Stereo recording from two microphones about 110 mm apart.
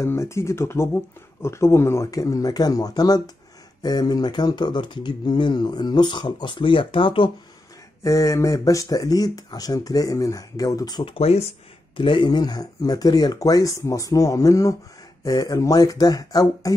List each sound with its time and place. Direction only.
0.0 s speech: 25° left (ahead or behind); by 7.2 s 50° left (ahead or behind)
8.0 s speech: 30° left (ahead or behind)
11.1 s speech: 65° left (ahead or behind)
12.0 s speech: 50° left (ahead or behind)